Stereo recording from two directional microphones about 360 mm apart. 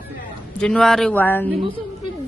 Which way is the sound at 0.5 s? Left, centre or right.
Centre.